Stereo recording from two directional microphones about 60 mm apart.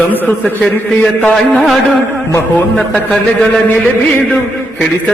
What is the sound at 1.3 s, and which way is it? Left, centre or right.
Music, centre.